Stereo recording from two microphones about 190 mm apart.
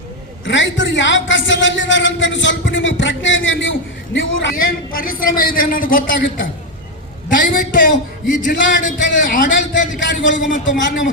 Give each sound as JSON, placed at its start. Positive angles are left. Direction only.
{"t": 0.4, "sound": "a man's voice", "side_deg": 75}
{"t": 4.5, "sound": "a man's voice", "side_deg": 50}
{"t": 7.3, "sound": "a man's voice", "side_deg": 45}